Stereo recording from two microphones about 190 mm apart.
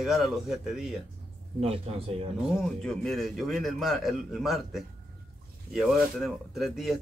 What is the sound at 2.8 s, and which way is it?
Speech, 5° left (ahead or behind).